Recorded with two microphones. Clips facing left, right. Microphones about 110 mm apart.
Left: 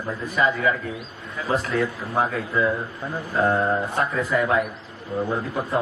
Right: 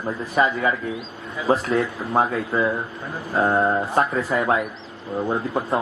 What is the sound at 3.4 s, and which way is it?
A man's voice, 30° right (ahead or behind).